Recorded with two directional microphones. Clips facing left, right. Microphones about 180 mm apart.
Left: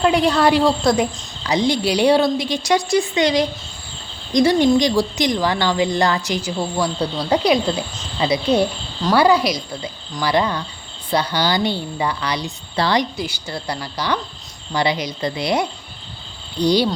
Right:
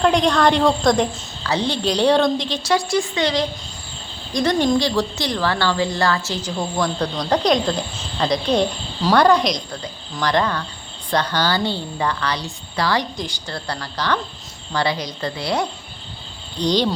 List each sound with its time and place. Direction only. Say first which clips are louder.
0.0 s a woman's voice: left 1 dB; 5° left (ahead or behind)
12.7 s a woman's voice: left 2 dB; 25° left (ahead or behind)
13.0 s a woman's voice: left 3 dB; 10° left (ahead or behind)